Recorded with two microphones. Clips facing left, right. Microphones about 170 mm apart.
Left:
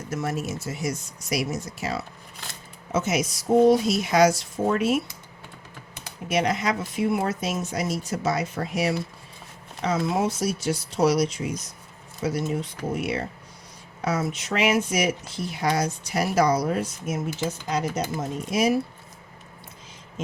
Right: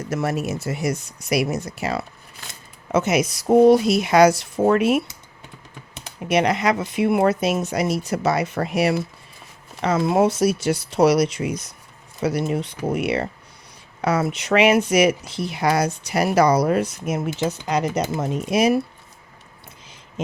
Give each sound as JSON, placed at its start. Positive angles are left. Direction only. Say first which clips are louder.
{"t": 0.1, "sound": "speech", "louder": "right 4 dB", "side_deg": -70}
{"t": 2.3, "sound": "a sound", "louder": "left 1 dB", "side_deg": 0}
{"t": 2.9, "sound": "speech", "louder": "right 5 dB", "side_deg": -65}
{"t": 6.2, "sound": "speech", "louder": "right 5 dB", "side_deg": -70}